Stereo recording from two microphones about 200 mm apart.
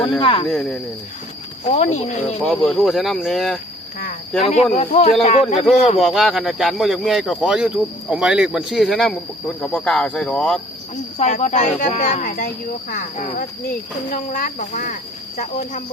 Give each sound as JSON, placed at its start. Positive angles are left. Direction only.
{"t": 0.2, "sound": "speech", "side_deg": 25}
{"t": 0.4, "sound": "speech", "side_deg": 0}
{"t": 1.6, "sound": "speech", "side_deg": 35}
{"t": 2.4, "sound": "speech", "side_deg": 0}
{"t": 4.4, "sound": "speech", "side_deg": 30}
{"t": 6.1, "sound": "speech", "side_deg": 0}
{"t": 11.2, "sound": "speech", "side_deg": 35}